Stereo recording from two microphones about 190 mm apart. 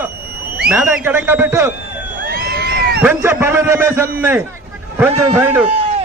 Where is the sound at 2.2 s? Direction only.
55° right (ahead or behind).